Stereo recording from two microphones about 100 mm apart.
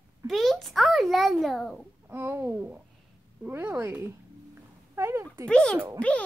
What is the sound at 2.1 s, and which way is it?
Speech, 20° right (ahead or behind).